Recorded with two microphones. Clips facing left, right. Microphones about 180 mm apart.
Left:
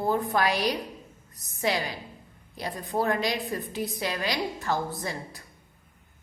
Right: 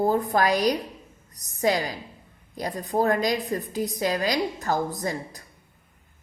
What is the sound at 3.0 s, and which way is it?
A woman's voice, 45° right (ahead or behind).